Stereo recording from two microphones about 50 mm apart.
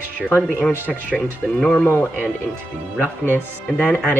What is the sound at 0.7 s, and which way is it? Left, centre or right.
Speech, right.